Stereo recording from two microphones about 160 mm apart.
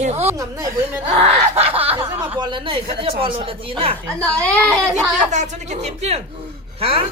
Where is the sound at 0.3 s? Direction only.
20° right (ahead or behind).